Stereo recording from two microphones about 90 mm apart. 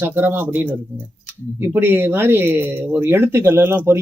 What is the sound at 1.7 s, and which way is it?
Speech, 25° right (ahead or behind).